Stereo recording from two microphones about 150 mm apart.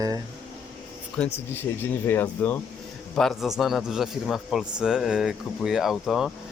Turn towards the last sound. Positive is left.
turn(degrees=0)  # may be behind; listen again after turning